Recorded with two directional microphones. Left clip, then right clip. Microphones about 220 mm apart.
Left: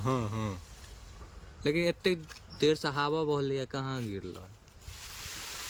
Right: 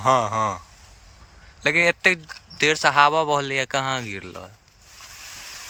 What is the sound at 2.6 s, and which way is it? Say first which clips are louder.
Speech: right 12 dB; 30° right (ahead or behind).